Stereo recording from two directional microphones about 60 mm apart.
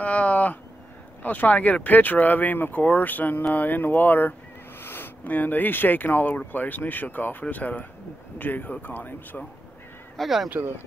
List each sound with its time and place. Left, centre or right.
0.0 s a sound: left
1.2 s speech: left
10.1 s speech: centre